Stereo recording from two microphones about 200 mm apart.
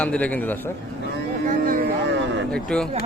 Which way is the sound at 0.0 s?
5° left (ahead or behind).